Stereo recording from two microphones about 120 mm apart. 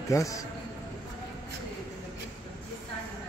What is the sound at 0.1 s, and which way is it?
Speech, 25° left (ahead or behind).